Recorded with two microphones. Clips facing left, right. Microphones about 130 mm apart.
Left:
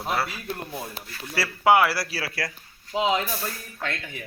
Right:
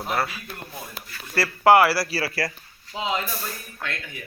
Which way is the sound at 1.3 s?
Centre (ahead or behind).